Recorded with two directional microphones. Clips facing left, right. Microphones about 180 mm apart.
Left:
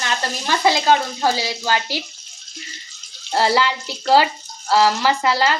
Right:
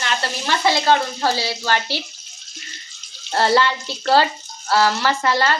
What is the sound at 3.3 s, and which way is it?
Speech, 10° left (ahead or behind).